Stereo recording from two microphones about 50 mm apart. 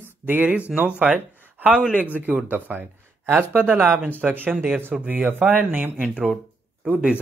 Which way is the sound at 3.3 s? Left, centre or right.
Right.